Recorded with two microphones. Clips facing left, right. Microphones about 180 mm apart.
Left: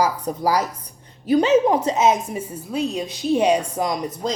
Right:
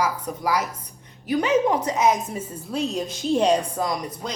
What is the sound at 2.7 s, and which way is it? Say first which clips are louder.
A woman's voice: left 2 dB; centre (ahead or behind).